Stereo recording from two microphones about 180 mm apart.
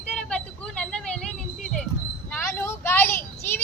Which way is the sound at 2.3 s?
10° left (ahead or behind).